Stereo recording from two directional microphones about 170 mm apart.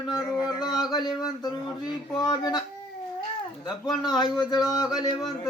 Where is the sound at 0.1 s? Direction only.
25° left (ahead or behind).